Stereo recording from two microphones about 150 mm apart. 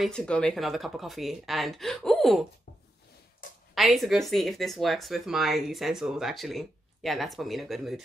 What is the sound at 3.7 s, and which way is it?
Speech, centre (ahead or behind).